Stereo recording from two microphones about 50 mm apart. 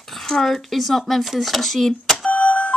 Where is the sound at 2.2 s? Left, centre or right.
Left.